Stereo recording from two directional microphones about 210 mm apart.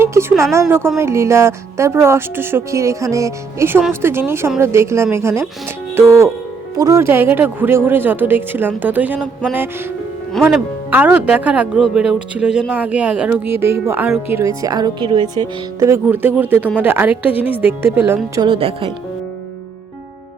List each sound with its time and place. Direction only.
0.0 s a sound: 10° right (ahead or behind)
0.5 s speech: 10° right (ahead or behind)
10.4 s speech: 10° right (ahead or behind)
18.3 s speech: 25° right (ahead or behind)